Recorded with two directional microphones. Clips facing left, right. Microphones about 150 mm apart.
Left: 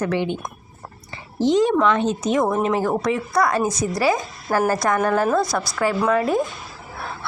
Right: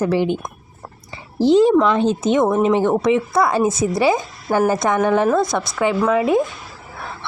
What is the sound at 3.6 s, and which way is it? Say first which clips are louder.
Speech: right 4 dB; 25° right (ahead or behind).